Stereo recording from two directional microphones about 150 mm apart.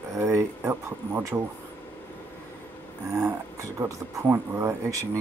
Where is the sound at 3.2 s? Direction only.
20° right (ahead or behind).